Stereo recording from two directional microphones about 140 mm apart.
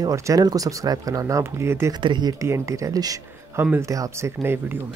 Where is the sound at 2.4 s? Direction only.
20° right (ahead or behind).